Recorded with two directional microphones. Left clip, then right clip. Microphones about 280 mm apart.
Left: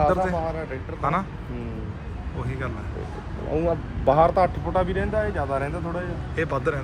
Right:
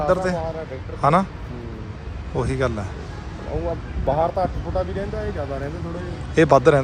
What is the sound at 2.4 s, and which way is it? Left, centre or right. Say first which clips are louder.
Speech: right 10 dB; centre.